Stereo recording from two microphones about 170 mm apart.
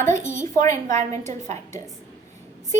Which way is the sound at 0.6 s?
15° left (ahead or behind).